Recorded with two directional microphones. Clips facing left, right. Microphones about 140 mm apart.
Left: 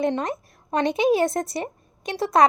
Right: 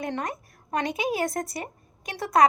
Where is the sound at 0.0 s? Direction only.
25° left (ahead or behind).